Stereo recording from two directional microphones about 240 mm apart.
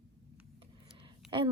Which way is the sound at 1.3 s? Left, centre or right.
Centre.